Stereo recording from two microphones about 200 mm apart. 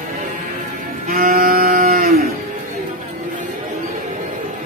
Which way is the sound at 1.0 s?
45° right (ahead or behind).